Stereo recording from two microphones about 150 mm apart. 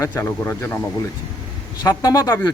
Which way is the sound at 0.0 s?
20° left (ahead or behind).